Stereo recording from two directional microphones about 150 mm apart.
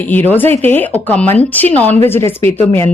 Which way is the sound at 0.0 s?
10° left (ahead or behind).